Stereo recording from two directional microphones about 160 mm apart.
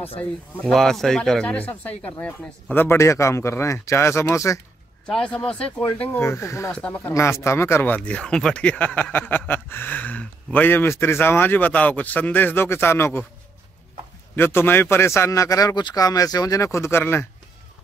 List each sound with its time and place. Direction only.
0.2 s speech: 5° left (ahead or behind)
5.0 s speech: 5° left (ahead or behind)
14.3 s speech: 15° left (ahead or behind)